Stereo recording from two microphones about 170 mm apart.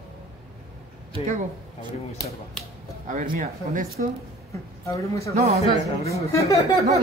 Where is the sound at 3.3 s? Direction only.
55° right (ahead or behind).